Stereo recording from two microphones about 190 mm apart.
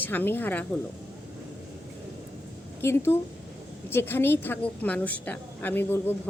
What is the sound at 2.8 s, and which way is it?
A woman's voice, 10° left (ahead or behind).